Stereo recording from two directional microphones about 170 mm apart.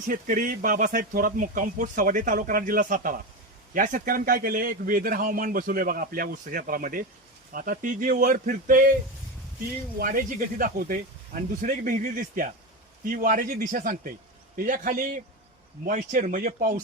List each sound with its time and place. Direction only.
0.1 s a man's voice: 55° right (ahead or behind)
10.0 s speech: 55° right (ahead or behind)